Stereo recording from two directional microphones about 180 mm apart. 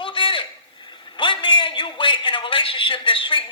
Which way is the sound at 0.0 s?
30° left (ahead or behind).